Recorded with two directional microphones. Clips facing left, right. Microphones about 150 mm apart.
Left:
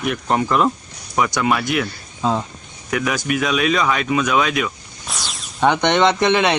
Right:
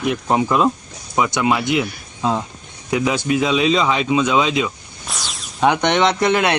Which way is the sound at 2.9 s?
25° right (ahead or behind).